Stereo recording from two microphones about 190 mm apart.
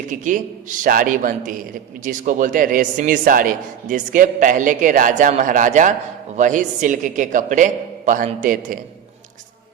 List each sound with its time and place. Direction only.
0.1 s a man's voice: 45° right (ahead or behind)